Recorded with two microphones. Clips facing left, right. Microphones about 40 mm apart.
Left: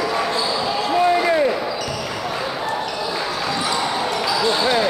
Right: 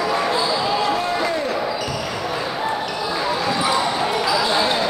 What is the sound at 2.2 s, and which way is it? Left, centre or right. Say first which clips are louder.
Basketball bounce: right 1 dB; centre.